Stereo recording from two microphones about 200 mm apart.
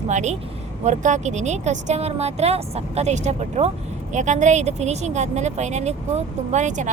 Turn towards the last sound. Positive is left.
turn(degrees=-35)  # may be behind; listen again after turning